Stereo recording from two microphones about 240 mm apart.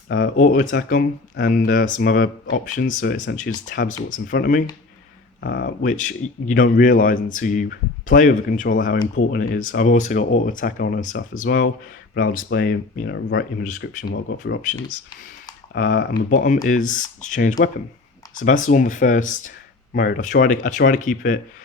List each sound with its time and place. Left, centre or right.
0.1 s speech: left
5.4 s speech: left
15.7 s speech: left